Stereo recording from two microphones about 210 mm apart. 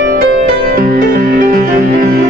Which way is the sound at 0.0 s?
50° right (ahead or behind).